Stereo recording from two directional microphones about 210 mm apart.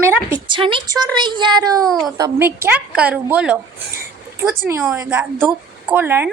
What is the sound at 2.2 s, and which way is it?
A woman's voice, 15° right (ahead or behind).